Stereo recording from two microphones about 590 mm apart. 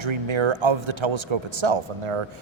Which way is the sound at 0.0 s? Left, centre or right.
Right.